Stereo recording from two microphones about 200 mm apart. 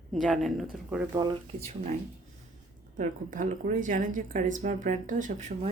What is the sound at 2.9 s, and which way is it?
Speech, 40° right (ahead or behind).